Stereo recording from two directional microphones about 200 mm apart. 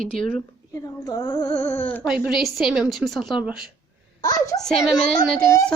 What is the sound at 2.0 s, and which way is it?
A woman's voice, 5° right (ahead or behind).